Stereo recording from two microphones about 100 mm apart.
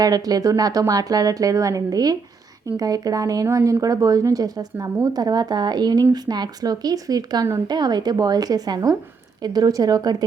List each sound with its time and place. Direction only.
0.0 s speech: 40° right (ahead or behind)